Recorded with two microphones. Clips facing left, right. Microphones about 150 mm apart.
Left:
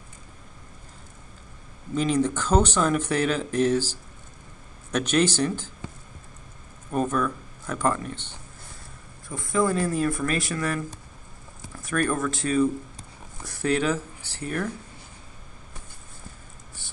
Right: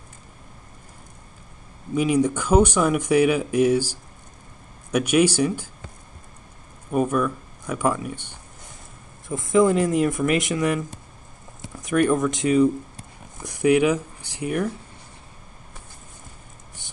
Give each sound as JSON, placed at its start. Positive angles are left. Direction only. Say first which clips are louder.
{"t": 2.0, "sound": "speech", "louder": "right 3 dB", "side_deg": -10}
{"t": 6.9, "sound": "speech", "louder": "right 3 dB", "side_deg": -10}
{"t": 9.4, "sound": "speech", "louder": "right 6 dB", "side_deg": -20}